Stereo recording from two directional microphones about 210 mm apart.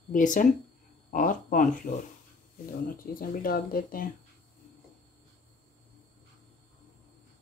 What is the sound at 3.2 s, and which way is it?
Speech, 45° left (ahead or behind).